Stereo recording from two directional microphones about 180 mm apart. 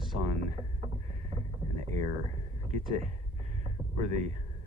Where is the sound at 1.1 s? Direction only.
40° right (ahead or behind).